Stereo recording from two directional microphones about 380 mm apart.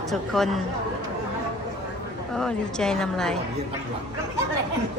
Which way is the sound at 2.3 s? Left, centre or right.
Centre.